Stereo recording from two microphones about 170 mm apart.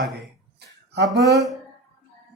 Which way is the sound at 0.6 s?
80° right.